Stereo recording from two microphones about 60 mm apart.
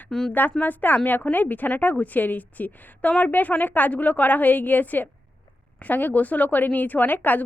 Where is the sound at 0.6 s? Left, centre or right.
Left.